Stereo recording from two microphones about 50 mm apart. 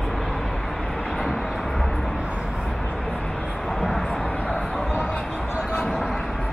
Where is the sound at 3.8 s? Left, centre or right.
Centre.